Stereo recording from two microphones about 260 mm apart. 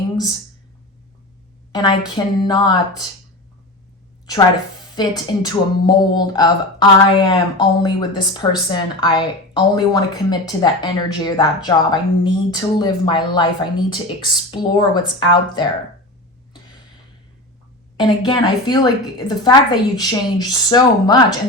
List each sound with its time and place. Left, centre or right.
1.7 s speech: centre
4.9 s speech: centre
17.9 s speech: centre